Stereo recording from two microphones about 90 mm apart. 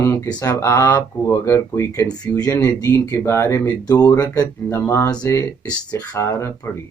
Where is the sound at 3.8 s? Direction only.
50° left (ahead or behind).